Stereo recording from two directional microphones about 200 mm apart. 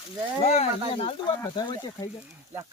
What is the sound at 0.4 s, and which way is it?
Speech, 30° left (ahead or behind).